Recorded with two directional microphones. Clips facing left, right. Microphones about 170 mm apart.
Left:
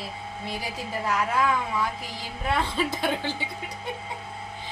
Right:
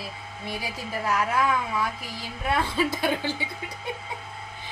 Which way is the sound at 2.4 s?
10° right (ahead or behind).